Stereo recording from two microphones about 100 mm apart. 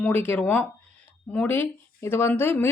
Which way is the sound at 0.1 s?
20° left (ahead or behind).